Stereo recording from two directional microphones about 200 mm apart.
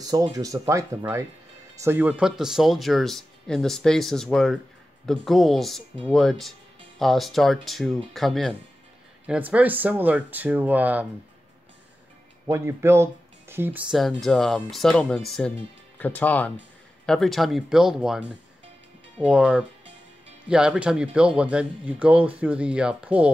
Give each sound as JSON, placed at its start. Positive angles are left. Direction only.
{"t": 0.1, "sound": "speech", "side_deg": -15}
{"t": 12.4, "sound": "speech", "side_deg": -15}
{"t": 19.2, "sound": "speech", "side_deg": -5}